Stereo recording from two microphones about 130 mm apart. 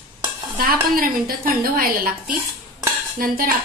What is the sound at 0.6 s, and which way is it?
A woman's voice, 90° right.